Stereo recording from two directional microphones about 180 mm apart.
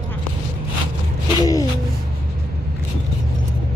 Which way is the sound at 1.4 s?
20° left (ahead or behind).